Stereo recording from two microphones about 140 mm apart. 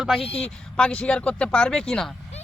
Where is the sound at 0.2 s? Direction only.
45° left (ahead or behind).